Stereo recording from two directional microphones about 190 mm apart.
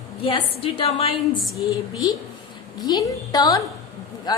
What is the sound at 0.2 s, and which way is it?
A woman's voice, 30° left (ahead or behind).